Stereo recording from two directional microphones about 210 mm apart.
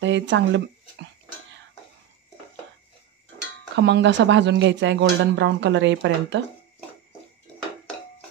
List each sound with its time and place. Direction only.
0.0 s speech: 60° right (ahead or behind)
3.7 s speech: 55° right (ahead or behind)